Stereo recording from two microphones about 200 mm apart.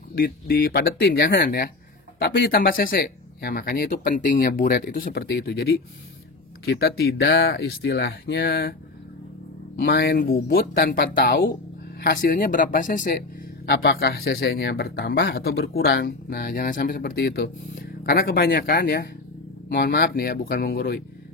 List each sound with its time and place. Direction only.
0.1 s speech: 50° left (ahead or behind)
9.8 s speech: 55° left (ahead or behind)
13.7 s speech: 55° left (ahead or behind)